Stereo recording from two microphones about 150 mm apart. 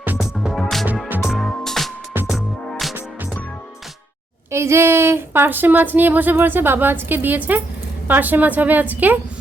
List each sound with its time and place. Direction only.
0.2 s music: centre (ahead or behind)
4.5 s speech: 15° right (ahead or behind)